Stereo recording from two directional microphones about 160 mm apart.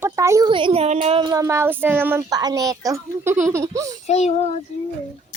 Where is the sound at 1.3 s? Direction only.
20° right (ahead or behind).